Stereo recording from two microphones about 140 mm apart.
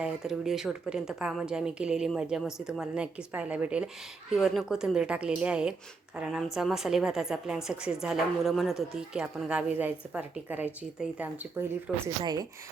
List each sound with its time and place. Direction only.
0.0 s speech: 5° right (ahead or behind)
12.0 s speech: 30° right (ahead or behind)